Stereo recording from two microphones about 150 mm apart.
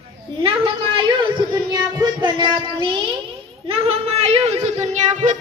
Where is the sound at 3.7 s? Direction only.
40° right (ahead or behind).